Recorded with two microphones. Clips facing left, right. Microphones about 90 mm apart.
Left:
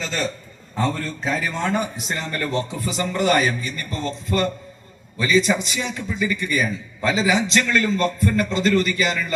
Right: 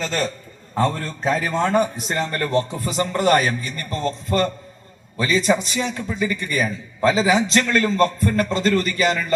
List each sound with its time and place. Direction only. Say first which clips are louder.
1.2 s a man's voice: right 5 dB; 45° right (ahead or behind)